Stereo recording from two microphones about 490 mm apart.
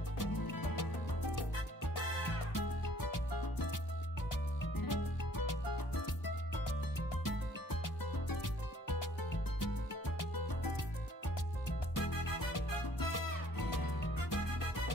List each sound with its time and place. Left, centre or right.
0.2 s music: left
2.5 s music: left
10.1 s music: left
11.9 s music: left